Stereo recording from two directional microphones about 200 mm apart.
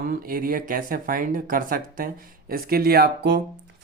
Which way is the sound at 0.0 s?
45° right (ahead or behind).